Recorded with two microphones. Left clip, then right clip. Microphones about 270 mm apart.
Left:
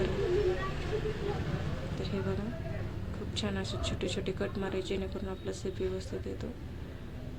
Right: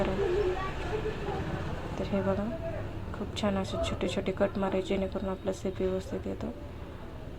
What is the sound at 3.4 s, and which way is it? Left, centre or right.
A woman's voice, centre.